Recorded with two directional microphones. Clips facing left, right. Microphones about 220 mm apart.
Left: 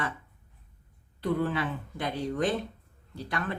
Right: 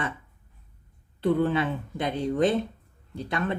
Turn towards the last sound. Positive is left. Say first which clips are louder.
# right 5 dB
turn(degrees=-20)  # may be behind; listen again after turning